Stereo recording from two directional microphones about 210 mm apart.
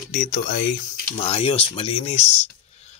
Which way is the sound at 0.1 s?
40° left (ahead or behind).